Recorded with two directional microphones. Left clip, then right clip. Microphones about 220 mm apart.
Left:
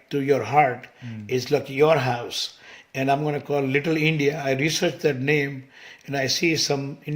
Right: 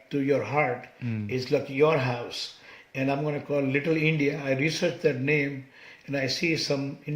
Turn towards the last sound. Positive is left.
turn(degrees=45)  # may be behind; listen again after turning